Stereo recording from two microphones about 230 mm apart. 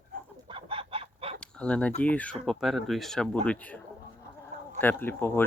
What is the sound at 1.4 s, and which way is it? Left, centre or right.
Speech, centre.